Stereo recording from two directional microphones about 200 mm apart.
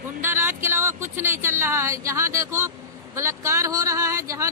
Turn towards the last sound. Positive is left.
turn(degrees=-15)  # may be behind; listen again after turning